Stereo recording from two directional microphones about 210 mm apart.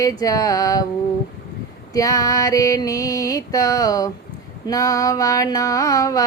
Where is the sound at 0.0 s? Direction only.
15° left (ahead or behind).